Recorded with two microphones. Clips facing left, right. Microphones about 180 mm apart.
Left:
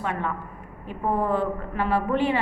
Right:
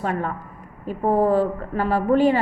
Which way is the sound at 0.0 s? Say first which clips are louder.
Right 3 dB; 40° right (ahead or behind).